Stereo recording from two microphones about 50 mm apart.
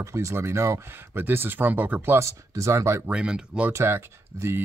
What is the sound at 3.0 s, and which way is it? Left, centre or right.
Speech, right.